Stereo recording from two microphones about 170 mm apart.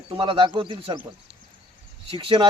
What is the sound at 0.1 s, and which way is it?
Speech, 30° right (ahead or behind).